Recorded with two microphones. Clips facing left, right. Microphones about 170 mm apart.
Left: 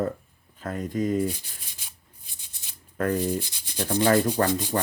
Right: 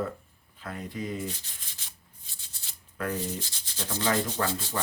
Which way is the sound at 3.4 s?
15° left (ahead or behind).